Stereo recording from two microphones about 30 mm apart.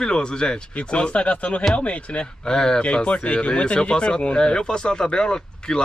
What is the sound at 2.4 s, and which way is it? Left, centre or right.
Speech, left.